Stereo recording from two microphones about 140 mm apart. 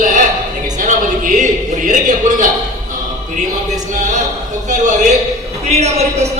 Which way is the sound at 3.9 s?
65° right (ahead or behind).